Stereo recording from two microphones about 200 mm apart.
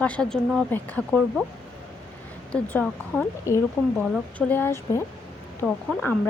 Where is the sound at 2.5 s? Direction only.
5° left (ahead or behind).